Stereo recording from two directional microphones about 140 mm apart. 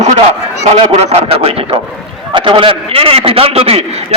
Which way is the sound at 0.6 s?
50° right (ahead or behind).